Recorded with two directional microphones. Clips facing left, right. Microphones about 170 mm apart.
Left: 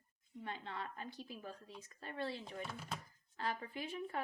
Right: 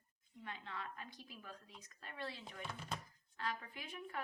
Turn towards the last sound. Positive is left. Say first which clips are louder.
# left 5 dB
turn(degrees=30)  # may be behind; listen again after turning